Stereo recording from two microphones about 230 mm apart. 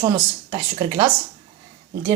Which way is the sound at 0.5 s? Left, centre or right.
Right.